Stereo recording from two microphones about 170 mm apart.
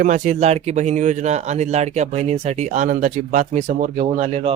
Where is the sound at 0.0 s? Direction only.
45° right (ahead or behind).